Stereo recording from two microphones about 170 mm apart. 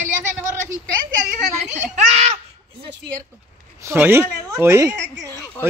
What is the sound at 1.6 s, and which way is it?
Children playing, 40° right (ahead or behind).